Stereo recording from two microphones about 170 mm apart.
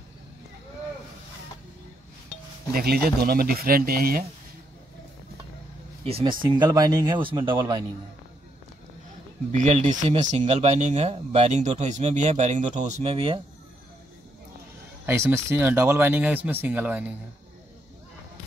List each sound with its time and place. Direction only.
2.7 s speech: 65° right (ahead or behind)
6.0 s speech: 35° right (ahead or behind)
6.4 s speech: 25° right (ahead or behind)
9.5 s speech: 45° right (ahead or behind); by 13.4 s 30° right (ahead or behind)
15.0 s speech: 15° right (ahead or behind)